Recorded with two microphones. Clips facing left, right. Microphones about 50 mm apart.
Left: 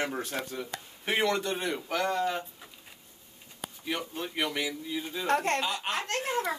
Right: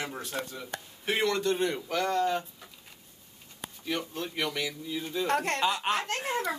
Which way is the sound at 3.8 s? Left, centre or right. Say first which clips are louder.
Right 1 dB; centre.